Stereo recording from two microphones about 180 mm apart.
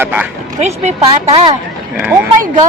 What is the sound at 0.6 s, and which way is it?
Speech, 40° right (ahead or behind).